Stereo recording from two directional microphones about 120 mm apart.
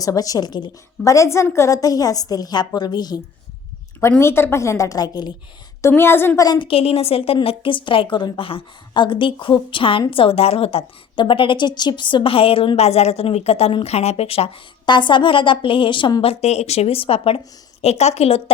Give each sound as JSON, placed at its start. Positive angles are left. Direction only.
{"t": 0.0, "sound": "a woman's voice", "side_deg": 30}
{"t": 4.2, "sound": "a woman's voice", "side_deg": 20}
{"t": 6.0, "sound": "a woman's voice", "side_deg": 20}
{"t": 6.4, "sound": "a woman's voice", "side_deg": 35}
{"t": 6.7, "sound": "a woman's voice", "side_deg": 55}
{"t": 14.8, "sound": "a woman's voice", "side_deg": 40}
{"t": 17.8, "sound": "a woman's voice", "side_deg": 65}